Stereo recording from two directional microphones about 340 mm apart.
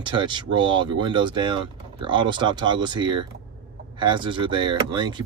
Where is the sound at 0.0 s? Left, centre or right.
Centre.